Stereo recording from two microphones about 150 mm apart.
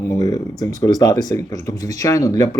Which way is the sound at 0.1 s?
25° left (ahead or behind).